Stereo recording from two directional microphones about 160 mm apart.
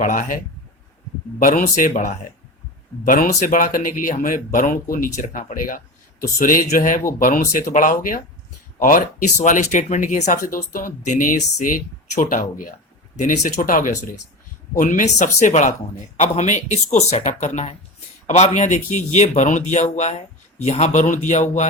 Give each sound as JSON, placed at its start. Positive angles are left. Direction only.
{"t": 0.0, "sound": "speech", "side_deg": 55}
{"t": 1.4, "sound": "speech", "side_deg": 55}